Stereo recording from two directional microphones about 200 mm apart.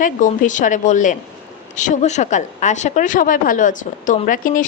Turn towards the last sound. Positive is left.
turn(degrees=40)  # may be behind; listen again after turning